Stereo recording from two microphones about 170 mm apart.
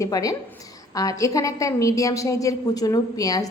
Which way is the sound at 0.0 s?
20° left (ahead or behind).